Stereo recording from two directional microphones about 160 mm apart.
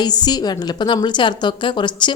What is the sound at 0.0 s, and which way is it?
A woman's voice, 25° left (ahead or behind).